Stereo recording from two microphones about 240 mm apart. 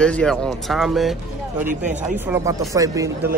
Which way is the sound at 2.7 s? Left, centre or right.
Centre.